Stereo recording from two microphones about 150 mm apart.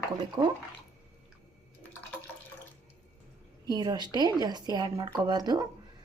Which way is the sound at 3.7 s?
30° right (ahead or behind).